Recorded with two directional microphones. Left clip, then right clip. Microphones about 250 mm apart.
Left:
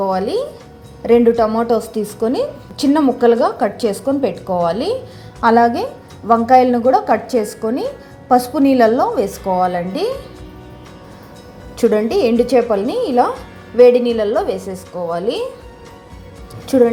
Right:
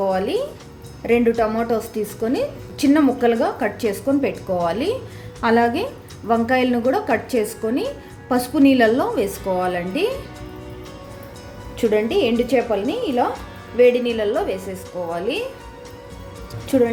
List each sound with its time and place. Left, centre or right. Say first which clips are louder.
0.0 s a woman's voice: left 3 dB; centre
9.3 s speech: left 4 dB; centre
9.6 s a woman's voice: left 4 dB; centre
11.8 s a woman's voice: left 4 dB; centre
16.6 s speech: left 5 dB; centre